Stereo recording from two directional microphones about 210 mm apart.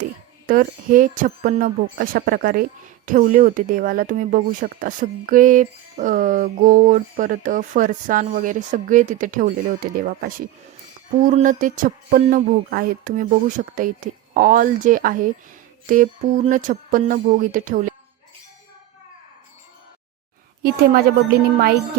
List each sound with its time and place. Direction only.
0.4 s speech: 40° right (ahead or behind)
20.6 s speech: 45° right (ahead or behind)